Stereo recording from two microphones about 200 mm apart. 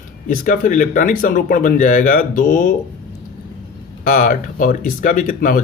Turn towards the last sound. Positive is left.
turn(degrees=45)  # may be behind; listen again after turning